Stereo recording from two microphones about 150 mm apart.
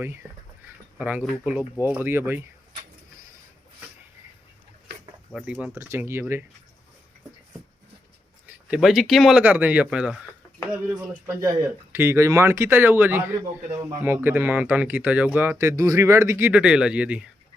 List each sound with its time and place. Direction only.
0.0 s speech: 15° right (ahead or behind)
5.3 s speech: 10° right (ahead or behind)
8.4 s speech: 5° right (ahead or behind)
9.4 s speech: 10° right (ahead or behind)
11.9 s speech: 15° right (ahead or behind)